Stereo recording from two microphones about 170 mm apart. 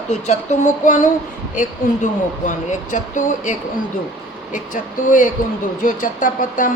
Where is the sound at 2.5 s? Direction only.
50° left (ahead or behind).